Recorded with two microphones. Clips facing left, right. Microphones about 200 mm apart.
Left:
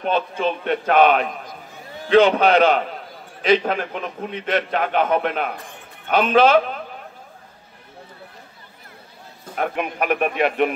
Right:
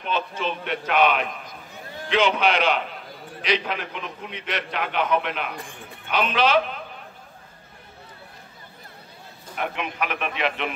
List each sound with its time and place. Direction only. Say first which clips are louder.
0.0 s a man's voice: left 6 dB; 50° left (ahead or behind)
9.6 s a man's voice: left 5 dB; 50° left (ahead or behind)